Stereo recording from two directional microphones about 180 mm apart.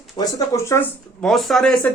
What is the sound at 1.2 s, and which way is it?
Speech, centre (ahead or behind).